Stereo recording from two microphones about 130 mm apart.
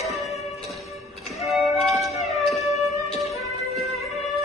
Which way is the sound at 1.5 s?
Centre (ahead or behind).